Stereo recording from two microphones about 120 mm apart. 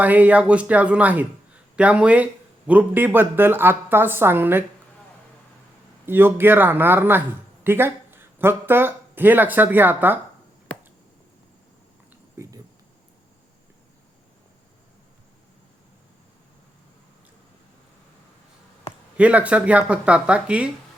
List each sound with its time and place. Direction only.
0.0 s a woman's voice: 15° right (ahead or behind)
6.1 s a man's voice: 20° right (ahead or behind)
12.4 s speech: 20° right (ahead or behind)
19.1 s a woman's voice: 10° right (ahead or behind)